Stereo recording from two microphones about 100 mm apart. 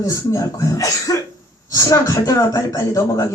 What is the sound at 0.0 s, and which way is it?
A man's voice, 30° left (ahead or behind).